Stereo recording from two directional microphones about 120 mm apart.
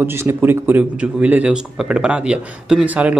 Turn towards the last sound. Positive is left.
turn(degrees=-10)  # may be behind; listen again after turning